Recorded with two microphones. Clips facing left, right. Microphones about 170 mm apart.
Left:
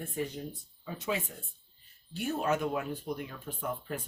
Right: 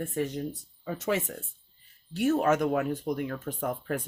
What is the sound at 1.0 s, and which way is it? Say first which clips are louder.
Speech: right 5 dB; 85° right.